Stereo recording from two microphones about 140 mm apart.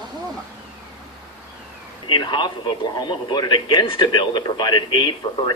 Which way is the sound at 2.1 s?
35° left (ahead or behind).